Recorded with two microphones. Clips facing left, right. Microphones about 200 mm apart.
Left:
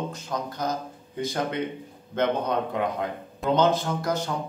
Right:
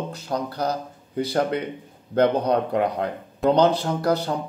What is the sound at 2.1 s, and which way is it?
A man's voice, 35° right (ahead or behind).